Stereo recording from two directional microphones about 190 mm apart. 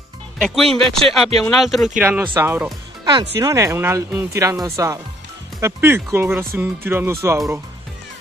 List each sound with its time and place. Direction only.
0.4 s speech: centre (ahead or behind)
2.0 s speech: 10° right (ahead or behind)